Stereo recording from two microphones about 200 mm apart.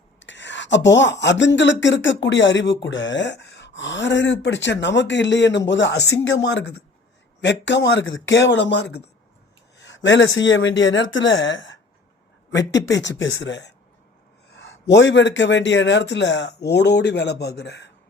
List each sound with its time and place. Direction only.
0.2 s speech: 65° left (ahead or behind)